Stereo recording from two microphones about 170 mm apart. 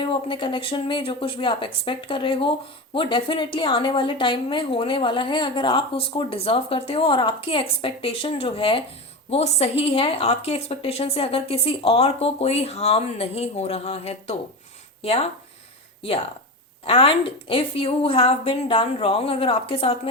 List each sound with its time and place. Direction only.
0.0 s a woman's voice: 30° left (ahead or behind)
16.8 s a woman's voice: 30° left (ahead or behind)